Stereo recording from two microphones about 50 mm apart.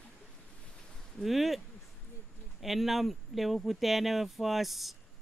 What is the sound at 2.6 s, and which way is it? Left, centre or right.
Speech, centre.